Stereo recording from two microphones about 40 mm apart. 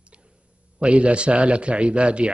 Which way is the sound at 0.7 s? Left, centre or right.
Right.